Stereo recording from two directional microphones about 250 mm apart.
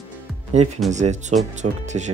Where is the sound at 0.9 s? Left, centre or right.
Right.